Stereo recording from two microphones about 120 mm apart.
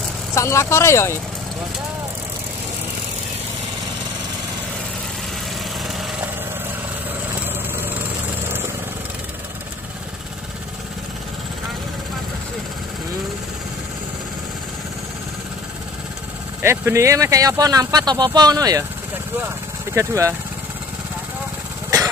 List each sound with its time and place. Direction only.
0.3 s speech: 25° left (ahead or behind)
16.6 s speech: 25° right (ahead or behind)